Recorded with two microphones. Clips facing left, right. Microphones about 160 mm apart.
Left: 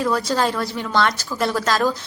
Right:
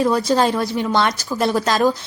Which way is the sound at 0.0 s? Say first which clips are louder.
Right 4 dB; 20° right (ahead or behind).